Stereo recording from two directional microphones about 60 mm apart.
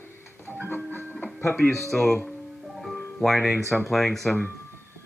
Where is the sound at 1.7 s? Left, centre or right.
Centre.